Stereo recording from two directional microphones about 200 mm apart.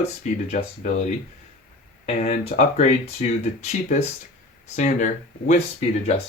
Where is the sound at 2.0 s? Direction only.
40° left (ahead or behind).